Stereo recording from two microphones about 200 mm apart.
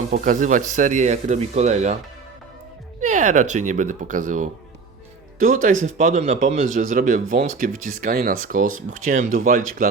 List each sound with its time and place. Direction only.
0.1 s speech: 40° right (ahead or behind)
3.0 s speech: 40° right (ahead or behind)